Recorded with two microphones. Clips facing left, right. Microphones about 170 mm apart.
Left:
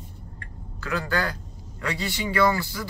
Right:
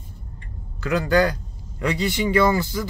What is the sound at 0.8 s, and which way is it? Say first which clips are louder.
A man's voice: right 8 dB; 20° right (ahead or behind).